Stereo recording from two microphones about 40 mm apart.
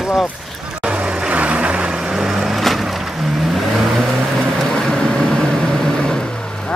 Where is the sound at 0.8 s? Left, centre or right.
Right.